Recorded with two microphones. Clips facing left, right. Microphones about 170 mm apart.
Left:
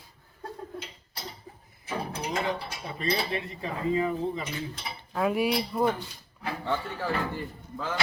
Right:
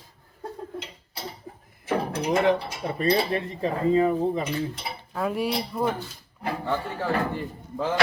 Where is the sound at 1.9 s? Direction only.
65° right (ahead or behind).